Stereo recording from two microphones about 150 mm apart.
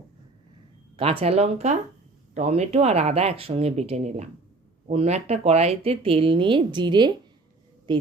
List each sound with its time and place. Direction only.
0.9 s speech: 40° right (ahead or behind)